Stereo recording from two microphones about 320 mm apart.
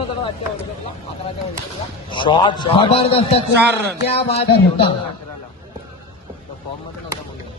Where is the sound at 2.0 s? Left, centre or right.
Centre.